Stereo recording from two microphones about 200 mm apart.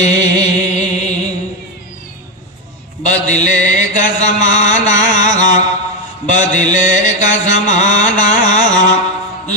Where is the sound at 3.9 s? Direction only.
40° left (ahead or behind).